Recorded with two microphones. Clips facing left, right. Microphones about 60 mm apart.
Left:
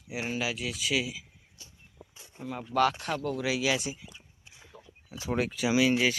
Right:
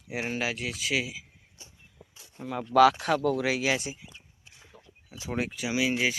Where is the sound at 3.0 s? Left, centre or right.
Right.